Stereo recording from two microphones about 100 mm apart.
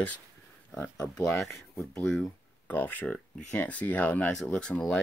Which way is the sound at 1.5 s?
30° left (ahead or behind).